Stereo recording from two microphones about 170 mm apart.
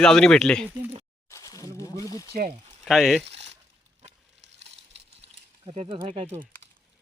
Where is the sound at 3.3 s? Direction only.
35° right (ahead or behind).